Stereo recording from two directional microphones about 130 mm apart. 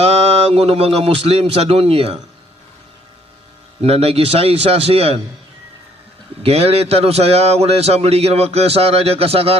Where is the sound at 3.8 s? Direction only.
50° right (ahead or behind).